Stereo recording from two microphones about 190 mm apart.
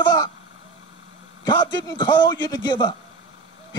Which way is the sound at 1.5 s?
20° left (ahead or behind).